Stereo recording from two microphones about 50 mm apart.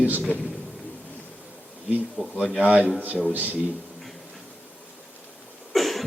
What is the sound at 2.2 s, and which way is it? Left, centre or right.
Speech, left.